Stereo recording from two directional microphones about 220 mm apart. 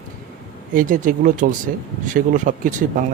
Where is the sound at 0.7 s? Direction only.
40° right (ahead or behind).